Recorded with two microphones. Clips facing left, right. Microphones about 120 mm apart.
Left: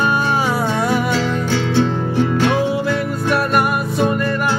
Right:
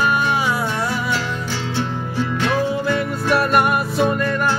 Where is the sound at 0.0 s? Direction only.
30° left (ahead or behind).